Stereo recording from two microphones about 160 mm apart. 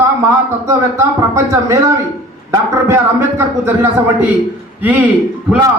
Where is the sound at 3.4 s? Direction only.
15° right (ahead or behind).